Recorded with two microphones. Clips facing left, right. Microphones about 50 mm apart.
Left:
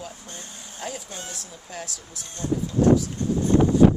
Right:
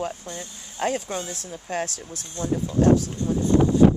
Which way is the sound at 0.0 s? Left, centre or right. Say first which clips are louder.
Right 8 dB; right.